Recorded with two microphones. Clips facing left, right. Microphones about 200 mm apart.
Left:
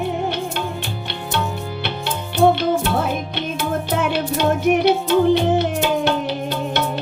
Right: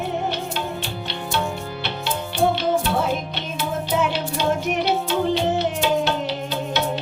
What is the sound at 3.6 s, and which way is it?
Music, 55° left (ahead or behind).